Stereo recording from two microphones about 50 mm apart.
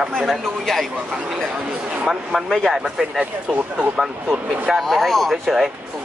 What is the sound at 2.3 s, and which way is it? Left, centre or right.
Speech, centre.